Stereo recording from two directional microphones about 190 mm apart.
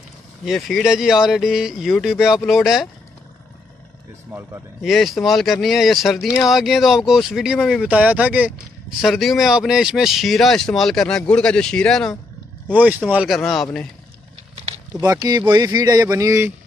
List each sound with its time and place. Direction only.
0.5 s speech: centre (ahead or behind)
4.3 s speech: 10° right (ahead or behind)
12.6 s speech: 10° right (ahead or behind)
14.5 s a sound: 30° right (ahead or behind)
15.0 s speech: 15° right (ahead or behind)